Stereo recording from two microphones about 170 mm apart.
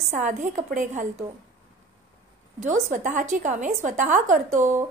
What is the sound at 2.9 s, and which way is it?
A woman's voice, 50° right (ahead or behind).